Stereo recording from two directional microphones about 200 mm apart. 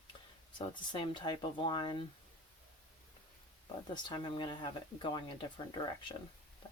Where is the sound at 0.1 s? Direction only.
25° left (ahead or behind).